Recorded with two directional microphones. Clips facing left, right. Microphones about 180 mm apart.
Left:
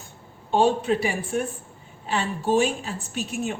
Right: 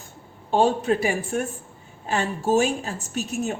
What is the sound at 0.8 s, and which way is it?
A woman's voice, 45° right (ahead or behind).